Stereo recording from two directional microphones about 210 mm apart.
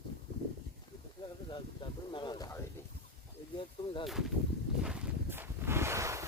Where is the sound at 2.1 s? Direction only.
20° left (ahead or behind).